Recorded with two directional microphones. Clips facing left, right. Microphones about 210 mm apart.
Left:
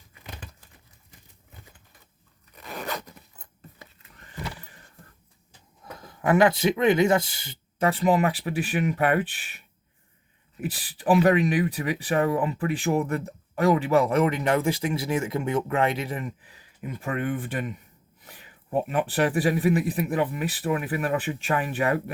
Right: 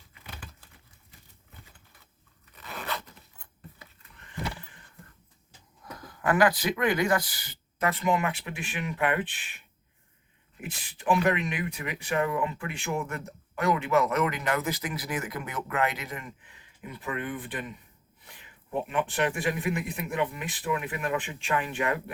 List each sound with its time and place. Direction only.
2.6 s zipper: 40° left (ahead or behind)
5.8 s speech: 25° left (ahead or behind)
16.9 s speech: 45° left (ahead or behind)